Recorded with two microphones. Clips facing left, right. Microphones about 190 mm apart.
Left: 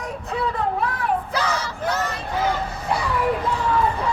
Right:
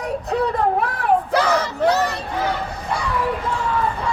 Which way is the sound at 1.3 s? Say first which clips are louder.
Right 6 dB; 60° right (ahead or behind).